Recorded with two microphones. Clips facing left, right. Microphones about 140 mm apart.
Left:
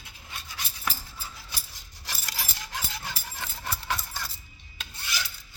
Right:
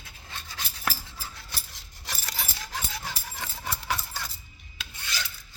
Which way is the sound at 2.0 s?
Centre (ahead or behind).